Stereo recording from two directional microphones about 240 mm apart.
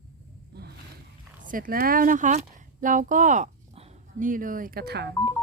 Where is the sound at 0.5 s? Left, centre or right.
Right.